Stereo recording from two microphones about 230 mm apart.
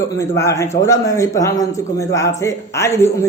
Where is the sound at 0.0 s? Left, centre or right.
Centre.